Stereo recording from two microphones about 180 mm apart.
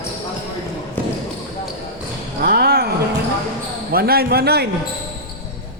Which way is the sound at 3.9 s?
60° right (ahead or behind).